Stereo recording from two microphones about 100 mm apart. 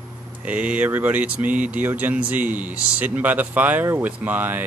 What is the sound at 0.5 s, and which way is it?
Speech, 15° right (ahead or behind).